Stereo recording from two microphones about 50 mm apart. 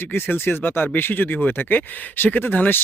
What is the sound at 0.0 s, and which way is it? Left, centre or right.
Speech, left.